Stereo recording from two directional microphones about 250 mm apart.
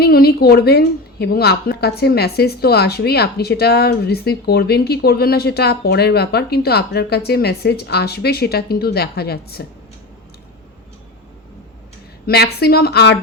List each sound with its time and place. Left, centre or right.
0.0 s a woman's voice: left
12.2 s a woman's voice: left